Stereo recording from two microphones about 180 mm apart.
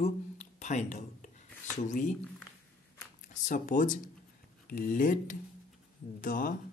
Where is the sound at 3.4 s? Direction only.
45° left (ahead or behind).